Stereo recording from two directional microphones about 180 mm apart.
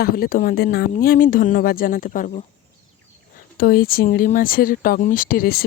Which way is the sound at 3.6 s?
55° left (ahead or behind).